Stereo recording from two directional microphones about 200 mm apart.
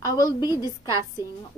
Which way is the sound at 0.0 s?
20° left (ahead or behind).